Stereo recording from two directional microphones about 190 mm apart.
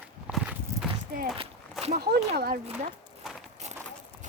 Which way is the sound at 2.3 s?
55° right (ahead or behind).